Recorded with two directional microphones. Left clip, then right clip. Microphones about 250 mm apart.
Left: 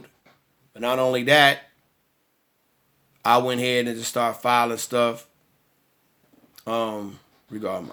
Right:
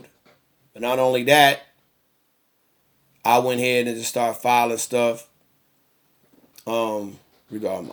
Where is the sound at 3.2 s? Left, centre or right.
Centre.